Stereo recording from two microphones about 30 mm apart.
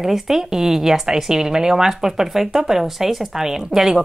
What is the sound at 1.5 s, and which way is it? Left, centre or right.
Speech, right.